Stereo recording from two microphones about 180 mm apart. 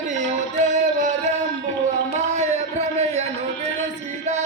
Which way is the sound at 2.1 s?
40° right (ahead or behind).